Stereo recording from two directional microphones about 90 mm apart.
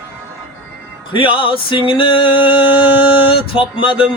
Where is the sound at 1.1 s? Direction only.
75° left (ahead or behind).